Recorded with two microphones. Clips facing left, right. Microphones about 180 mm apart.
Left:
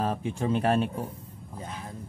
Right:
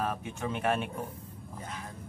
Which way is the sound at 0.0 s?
30° left (ahead or behind).